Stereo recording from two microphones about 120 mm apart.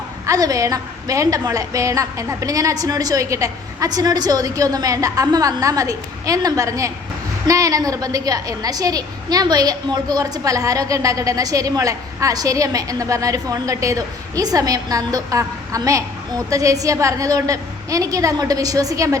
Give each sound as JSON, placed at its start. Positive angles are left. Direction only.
{"t": 0.3, "sound": "a woman's voice", "side_deg": -30}